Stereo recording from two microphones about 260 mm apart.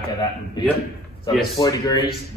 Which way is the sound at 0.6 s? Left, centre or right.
Centre.